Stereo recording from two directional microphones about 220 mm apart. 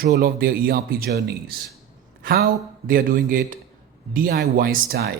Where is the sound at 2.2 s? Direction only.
45° right (ahead or behind).